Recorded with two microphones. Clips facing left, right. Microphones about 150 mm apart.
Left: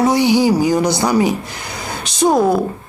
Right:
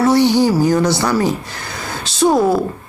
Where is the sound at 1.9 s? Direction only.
15° left (ahead or behind).